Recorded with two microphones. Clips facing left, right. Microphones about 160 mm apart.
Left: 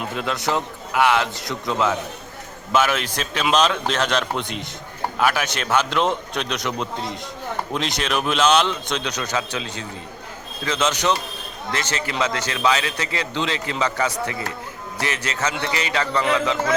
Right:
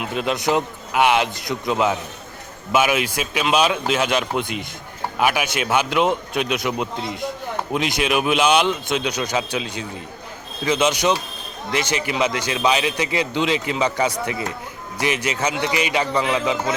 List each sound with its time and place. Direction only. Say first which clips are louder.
0.2 s a man's voice: right 4 dB; 15° right (ahead or behind)